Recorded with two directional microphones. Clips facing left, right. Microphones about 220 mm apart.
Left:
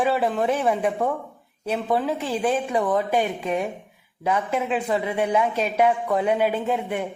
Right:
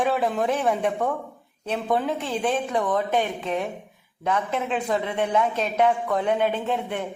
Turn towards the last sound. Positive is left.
turn(degrees=10)  # may be behind; listen again after turning